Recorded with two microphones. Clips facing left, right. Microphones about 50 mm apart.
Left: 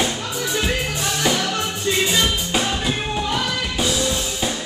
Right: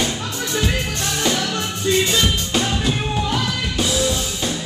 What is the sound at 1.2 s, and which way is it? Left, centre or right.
Music, centre.